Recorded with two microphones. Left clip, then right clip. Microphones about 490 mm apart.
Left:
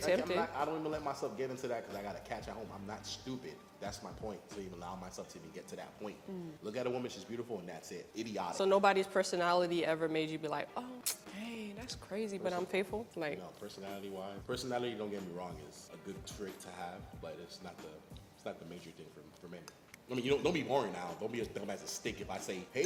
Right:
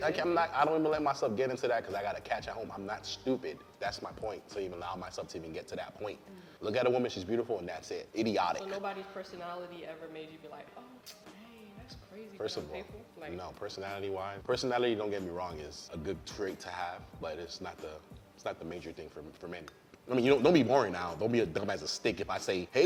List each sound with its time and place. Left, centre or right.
0.2 s a man's voice: right
8.8 s speech: left
12.7 s a woman's voice: left
13.4 s a man's voice: right
20.3 s a man's voice: right